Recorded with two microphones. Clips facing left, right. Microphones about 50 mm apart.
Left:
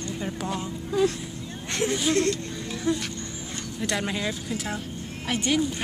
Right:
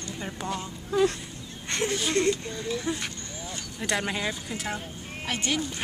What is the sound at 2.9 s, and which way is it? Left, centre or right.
Speech, right.